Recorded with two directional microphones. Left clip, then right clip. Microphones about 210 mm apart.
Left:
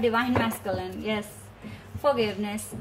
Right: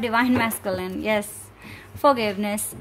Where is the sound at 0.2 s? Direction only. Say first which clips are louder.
Right 4 dB; 50° right (ahead or behind).